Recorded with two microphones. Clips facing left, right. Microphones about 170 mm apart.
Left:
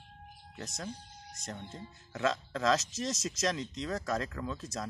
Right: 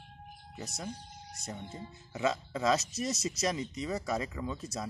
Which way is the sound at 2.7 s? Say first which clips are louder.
Right 1 dB; 90° left.